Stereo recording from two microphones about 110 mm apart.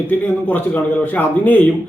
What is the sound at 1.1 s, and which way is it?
Speech, 15° left (ahead or behind).